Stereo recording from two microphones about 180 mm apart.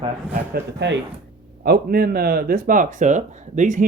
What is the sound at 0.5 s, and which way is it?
Speech, 75° right (ahead or behind).